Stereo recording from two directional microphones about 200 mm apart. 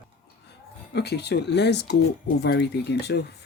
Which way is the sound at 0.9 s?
55° left (ahead or behind).